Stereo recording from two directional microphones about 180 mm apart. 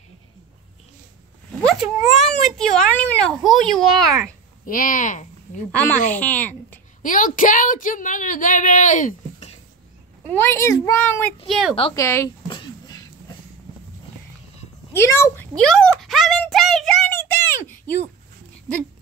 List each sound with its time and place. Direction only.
1.6 s a sound: centre (ahead or behind)
2.1 s a child's voice: centre (ahead or behind)
4.6 s speech: 50° left (ahead or behind)
6.1 s speech: 10° left (ahead or behind)
7.0 s a woman's voice: 45° left (ahead or behind)
10.2 s a child's voice: 10° left (ahead or behind)
11.4 s a child's voice: centre (ahead or behind)
11.9 s a child's voice: 15° left (ahead or behind)
12.4 s a sound: 25° left (ahead or behind)
14.9 s a sound: 15° left (ahead or behind)